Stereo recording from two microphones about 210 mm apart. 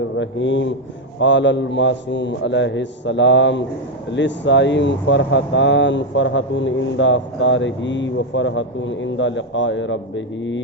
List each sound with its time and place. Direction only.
0.2 s speech: 60° left (ahead or behind)